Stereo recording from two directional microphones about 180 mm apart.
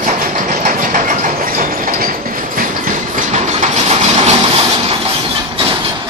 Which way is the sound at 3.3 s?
40° right (ahead or behind).